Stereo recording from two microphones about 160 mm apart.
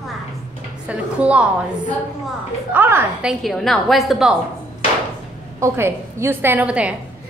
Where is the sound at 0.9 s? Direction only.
10° right (ahead or behind).